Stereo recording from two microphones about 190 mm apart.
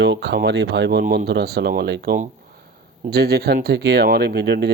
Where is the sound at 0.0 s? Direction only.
65° right (ahead or behind).